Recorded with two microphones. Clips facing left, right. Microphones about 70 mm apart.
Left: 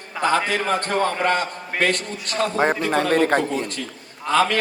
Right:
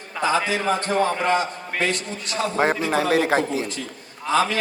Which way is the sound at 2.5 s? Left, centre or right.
Centre.